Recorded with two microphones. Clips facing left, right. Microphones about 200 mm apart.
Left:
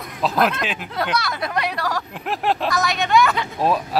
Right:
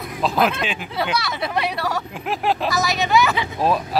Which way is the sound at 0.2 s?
Centre (ahead or behind).